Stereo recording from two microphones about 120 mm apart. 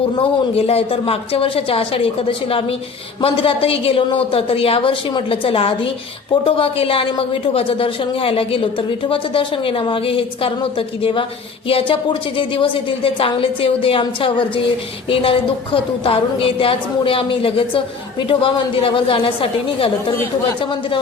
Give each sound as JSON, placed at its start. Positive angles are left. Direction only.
{"t": 0.2, "sound": "a woman's voice", "side_deg": 55}